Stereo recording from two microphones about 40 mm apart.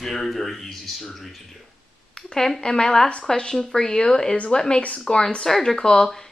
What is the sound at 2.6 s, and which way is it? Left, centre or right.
Speech, centre.